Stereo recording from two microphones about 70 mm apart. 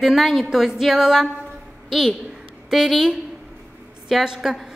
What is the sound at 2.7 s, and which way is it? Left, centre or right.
A woman's voice, centre.